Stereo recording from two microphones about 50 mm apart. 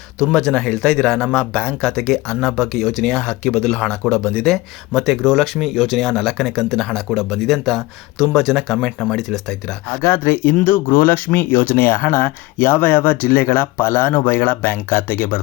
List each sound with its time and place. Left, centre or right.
0.2 s speech: centre
0.5 s speech: left
2.3 s speech: centre
2.6 s speech: centre
3.0 s speech: centre
4.2 s speech: centre
4.4 s speech: centre
7.1 s speech: centre
10.0 s speech: left